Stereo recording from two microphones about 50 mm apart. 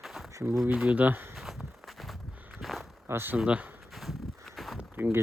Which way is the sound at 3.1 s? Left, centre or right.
Right.